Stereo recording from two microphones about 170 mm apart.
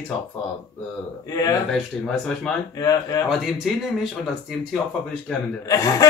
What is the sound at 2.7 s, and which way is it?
Speech, 20° left (ahead or behind).